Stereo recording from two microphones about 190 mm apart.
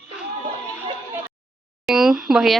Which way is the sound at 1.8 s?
Centre (ahead or behind).